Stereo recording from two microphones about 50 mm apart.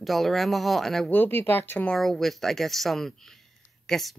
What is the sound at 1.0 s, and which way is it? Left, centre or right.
Speech, left.